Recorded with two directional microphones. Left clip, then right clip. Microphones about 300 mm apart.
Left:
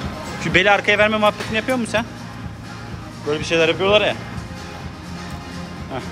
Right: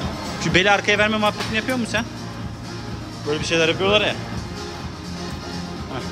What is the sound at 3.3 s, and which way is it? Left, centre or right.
Speech, centre.